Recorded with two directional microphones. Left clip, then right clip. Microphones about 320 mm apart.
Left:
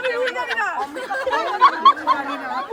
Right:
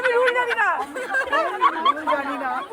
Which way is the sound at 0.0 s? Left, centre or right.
Centre.